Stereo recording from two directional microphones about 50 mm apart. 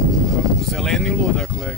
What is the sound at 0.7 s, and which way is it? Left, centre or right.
Speech, centre.